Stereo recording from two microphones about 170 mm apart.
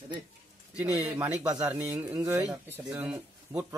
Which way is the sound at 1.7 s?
10° right (ahead or behind).